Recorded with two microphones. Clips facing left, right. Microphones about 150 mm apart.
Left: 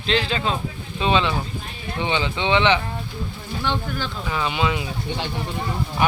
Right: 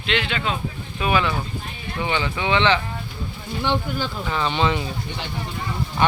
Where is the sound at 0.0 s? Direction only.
35° left (ahead or behind).